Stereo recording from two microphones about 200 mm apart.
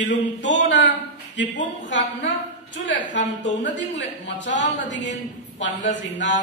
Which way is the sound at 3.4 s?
60° left (ahead or behind).